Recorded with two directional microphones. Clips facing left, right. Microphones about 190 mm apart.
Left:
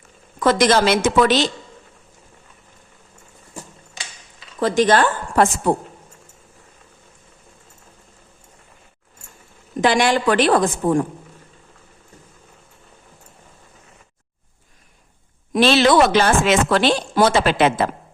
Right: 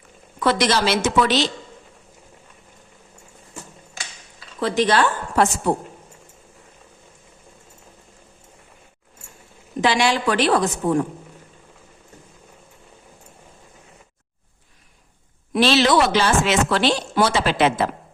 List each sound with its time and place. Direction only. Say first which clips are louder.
0.3 s speech: left 4 dB; 45° left (ahead or behind)
4.6 s speech: left 3 dB; 45° left (ahead or behind)
9.8 s speech: left 3 dB; 50° left (ahead or behind)
15.5 s speech: left 3 dB; 50° left (ahead or behind)